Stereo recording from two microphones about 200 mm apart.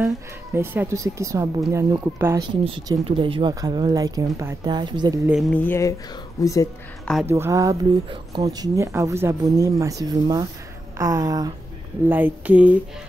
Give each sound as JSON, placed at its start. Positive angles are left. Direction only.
{"t": 0.6, "sound": "speech", "side_deg": -15}
{"t": 5.3, "sound": "speech", "side_deg": 5}
{"t": 7.2, "sound": "speech", "side_deg": -10}
{"t": 12.1, "sound": "speech", "side_deg": -10}